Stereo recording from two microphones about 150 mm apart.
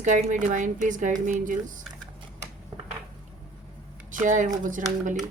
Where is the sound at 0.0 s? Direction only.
60° right (ahead or behind).